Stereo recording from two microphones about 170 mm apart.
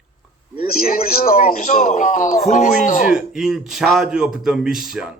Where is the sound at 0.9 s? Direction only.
55° left (ahead or behind).